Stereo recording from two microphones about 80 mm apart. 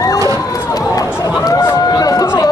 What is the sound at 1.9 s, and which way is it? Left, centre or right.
Speech, left.